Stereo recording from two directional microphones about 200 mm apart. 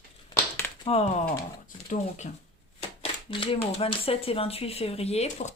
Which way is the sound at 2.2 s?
35° left (ahead or behind).